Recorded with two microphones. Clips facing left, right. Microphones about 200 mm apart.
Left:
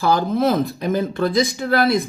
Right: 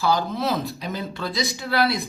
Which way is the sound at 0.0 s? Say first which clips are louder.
Left 5 dB; 50° left (ahead or behind).